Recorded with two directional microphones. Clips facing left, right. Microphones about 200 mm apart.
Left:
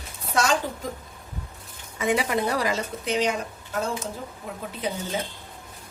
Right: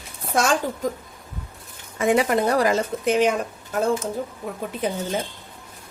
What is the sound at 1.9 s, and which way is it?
A woman's voice, 45° right (ahead or behind).